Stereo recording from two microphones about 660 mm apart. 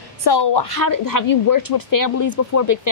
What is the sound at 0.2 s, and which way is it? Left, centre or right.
A woman's voice, left.